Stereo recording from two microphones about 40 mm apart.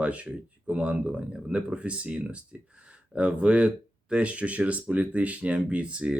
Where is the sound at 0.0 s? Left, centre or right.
Right.